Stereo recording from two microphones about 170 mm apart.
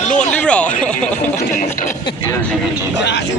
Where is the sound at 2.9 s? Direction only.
90° left.